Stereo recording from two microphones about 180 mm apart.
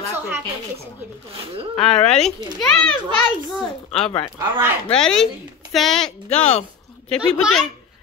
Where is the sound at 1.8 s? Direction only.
5° left (ahead or behind).